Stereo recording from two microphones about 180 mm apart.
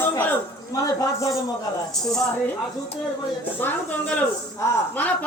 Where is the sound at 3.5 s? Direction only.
10° left (ahead or behind).